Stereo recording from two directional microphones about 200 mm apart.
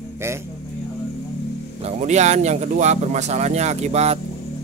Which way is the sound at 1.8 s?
35° right (ahead or behind).